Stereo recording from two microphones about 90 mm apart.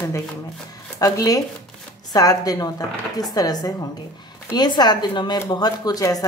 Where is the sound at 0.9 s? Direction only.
40° left (ahead or behind).